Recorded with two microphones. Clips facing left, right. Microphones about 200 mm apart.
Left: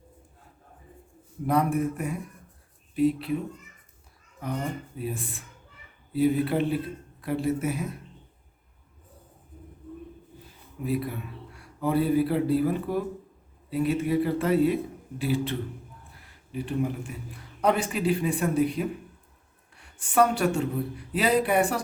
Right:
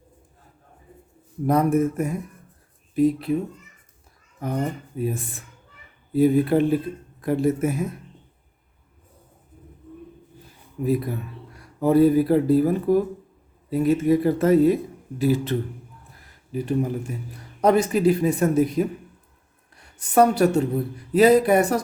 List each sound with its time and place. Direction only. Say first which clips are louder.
1.5 s speech: right 5 dB; 45° right (ahead or behind)
4.9 s speech: right 6 dB; 45° right (ahead or behind)
10.8 s speech: right 5 dB; 40° right (ahead or behind)